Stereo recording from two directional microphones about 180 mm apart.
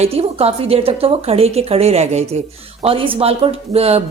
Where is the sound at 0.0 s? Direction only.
35° right (ahead or behind).